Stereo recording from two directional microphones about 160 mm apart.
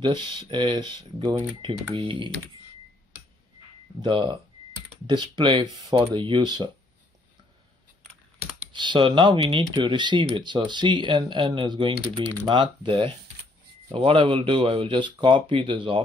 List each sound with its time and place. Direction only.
0.4 s speech: 30° right (ahead or behind)
4.0 s speech: 30° right (ahead or behind)
8.7 s speech: 30° right (ahead or behind)